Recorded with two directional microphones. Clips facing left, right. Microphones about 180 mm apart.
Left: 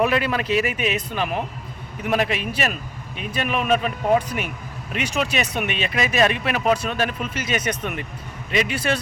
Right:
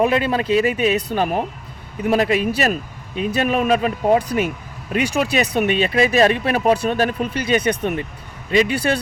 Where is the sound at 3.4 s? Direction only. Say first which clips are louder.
Right 3 dB; 35° right (ahead or behind).